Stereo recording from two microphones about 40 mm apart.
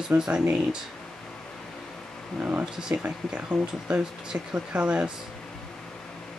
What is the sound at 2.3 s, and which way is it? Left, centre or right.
Speech, right.